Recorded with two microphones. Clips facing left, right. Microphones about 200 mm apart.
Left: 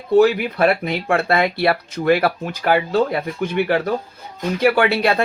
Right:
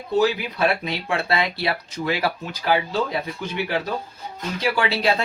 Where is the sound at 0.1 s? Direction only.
55° left (ahead or behind).